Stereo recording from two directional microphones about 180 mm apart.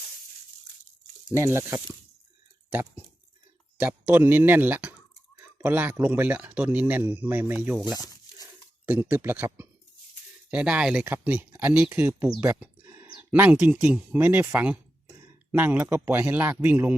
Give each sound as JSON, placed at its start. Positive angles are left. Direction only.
{"t": 1.3, "sound": "a man's voice", "side_deg": -15}
{"t": 7.9, "sound": "tearing", "side_deg": 20}
{"t": 8.9, "sound": "a man's voice", "side_deg": -10}
{"t": 12.4, "sound": "a sound", "side_deg": -10}
{"t": 13.1, "sound": "a man's voice", "side_deg": -10}